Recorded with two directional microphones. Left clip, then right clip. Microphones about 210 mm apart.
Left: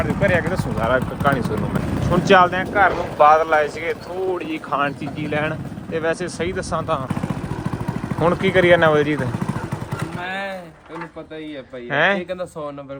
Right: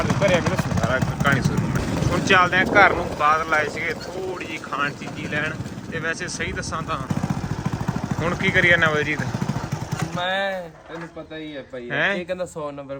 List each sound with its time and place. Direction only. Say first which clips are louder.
0.0 s speech: left 1 dB; 15° right (ahead or behind)
0.9 s speech: left 3 dB; 20° left (ahead or behind)
8.2 s speech: left 3 dB; 15° left (ahead or behind)
10.2 s speech: right 5 dB; 5° right (ahead or behind)
11.9 s speech: left 4 dB; 5° left (ahead or behind)